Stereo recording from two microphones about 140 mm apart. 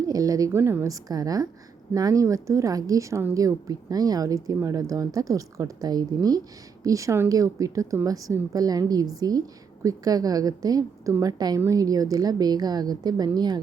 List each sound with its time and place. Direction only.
0.1 s a woman's voice: 25° right (ahead or behind)